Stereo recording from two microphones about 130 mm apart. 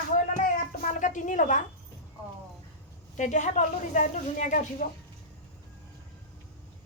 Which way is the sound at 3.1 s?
70° left (ahead or behind).